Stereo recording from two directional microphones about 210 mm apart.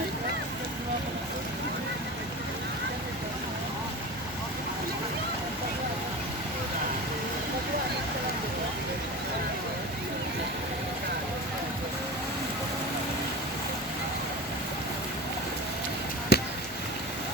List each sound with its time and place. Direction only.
16.3 s chop: 50° left (ahead or behind)